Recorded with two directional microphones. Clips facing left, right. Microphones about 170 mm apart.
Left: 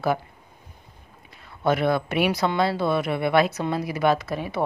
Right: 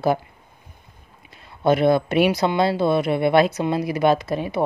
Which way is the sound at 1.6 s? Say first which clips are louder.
Right 5 dB; 25° right (ahead or behind).